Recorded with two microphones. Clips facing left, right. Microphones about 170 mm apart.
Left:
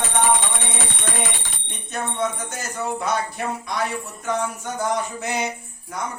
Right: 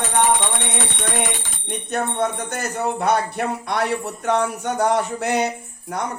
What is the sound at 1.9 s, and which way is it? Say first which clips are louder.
Speech: right 3 dB; 60° right (ahead or behind).